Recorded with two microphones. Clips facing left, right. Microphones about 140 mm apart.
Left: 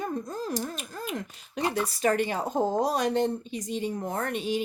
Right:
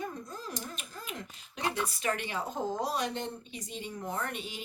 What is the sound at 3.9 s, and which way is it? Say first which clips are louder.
Speech: left 5 dB; 50° left (ahead or behind).